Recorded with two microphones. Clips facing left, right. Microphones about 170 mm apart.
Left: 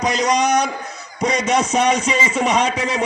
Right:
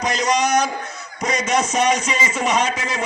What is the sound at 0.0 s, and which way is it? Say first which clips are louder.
A man's voice: left 2 dB; 35° left (ahead or behind).